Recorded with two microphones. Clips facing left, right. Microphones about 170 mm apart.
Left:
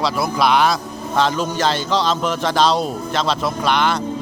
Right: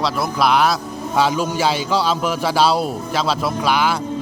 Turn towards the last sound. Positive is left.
turn(degrees=-5)  # may be behind; listen again after turning